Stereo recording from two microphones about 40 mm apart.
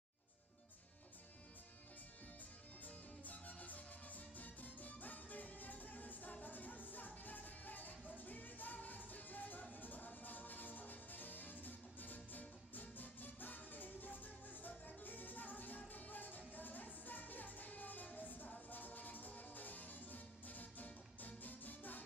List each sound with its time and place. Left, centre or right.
2.8 s music: left